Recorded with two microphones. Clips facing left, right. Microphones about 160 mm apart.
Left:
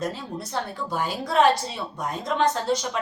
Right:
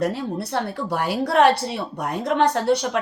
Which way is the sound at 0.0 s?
65° right (ahead or behind).